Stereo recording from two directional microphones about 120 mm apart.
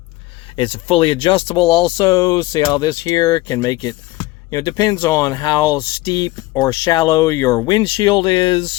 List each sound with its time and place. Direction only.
0.5 s speech: 50° left (ahead or behind)
1.7 s speech: 35° left (ahead or behind)